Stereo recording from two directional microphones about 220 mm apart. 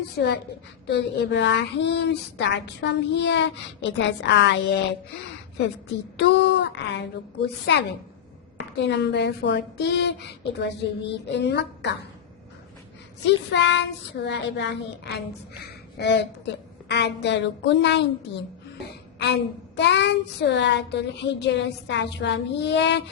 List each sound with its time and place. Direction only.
0.2 s a woman's voice: 50° left (ahead or behind)
6.1 s a woman's voice: 50° left (ahead or behind)
13.2 s a woman's voice: 55° left (ahead or behind)
15.6 s a sound: 50° left (ahead or behind)
16.5 s a woman's voice: 50° left (ahead or behind)